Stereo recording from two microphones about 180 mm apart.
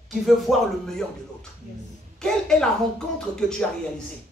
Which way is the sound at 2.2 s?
5° left (ahead or behind).